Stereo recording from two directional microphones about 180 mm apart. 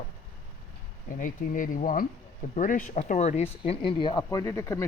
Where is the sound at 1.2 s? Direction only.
45° left (ahead or behind).